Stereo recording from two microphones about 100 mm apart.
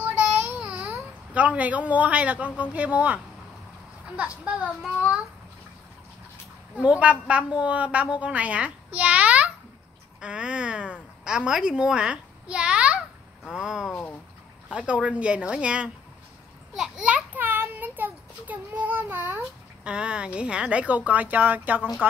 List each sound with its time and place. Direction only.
0.0 s baby cry: 20° right (ahead or behind)
0.6 s speech: 10° right (ahead or behind)
4.2 s a woman's voice: 15° right (ahead or behind)
6.8 s a woman's voice: 10° right (ahead or behind)
10.2 s a sound: 10° right (ahead or behind)
13.5 s a woman's voice: 5° right (ahead or behind)